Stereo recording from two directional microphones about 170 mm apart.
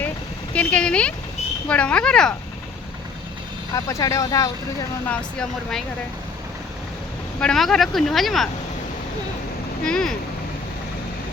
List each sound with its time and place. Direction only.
0.5 s speech: 10° left (ahead or behind)
3.8 s speech: 20° left (ahead or behind)
5.0 s speech: 5° left (ahead or behind)
7.3 s speech: 5° left (ahead or behind)
9.8 s speech: 5° left (ahead or behind)